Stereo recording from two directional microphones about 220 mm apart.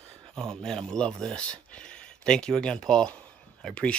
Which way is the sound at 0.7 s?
5° left (ahead or behind).